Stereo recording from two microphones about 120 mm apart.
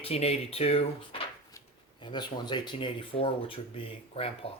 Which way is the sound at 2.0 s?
40° left (ahead or behind).